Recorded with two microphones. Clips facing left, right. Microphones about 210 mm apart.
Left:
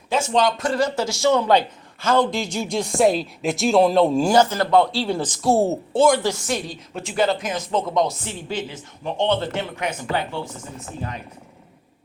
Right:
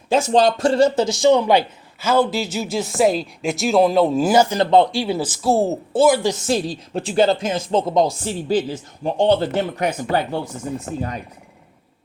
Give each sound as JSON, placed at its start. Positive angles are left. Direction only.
{"t": 0.1, "sound": "a man's voice", "side_deg": -35}
{"t": 6.3, "sound": "speech", "side_deg": -30}